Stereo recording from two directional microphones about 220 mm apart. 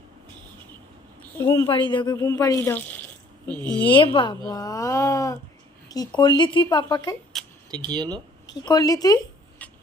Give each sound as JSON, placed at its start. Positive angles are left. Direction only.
{"t": 1.4, "sound": "speech", "side_deg": 15}
{"t": 3.8, "sound": "speech", "side_deg": 20}
{"t": 7.7, "sound": "speech", "side_deg": -20}
{"t": 8.4, "sound": "speech", "side_deg": 15}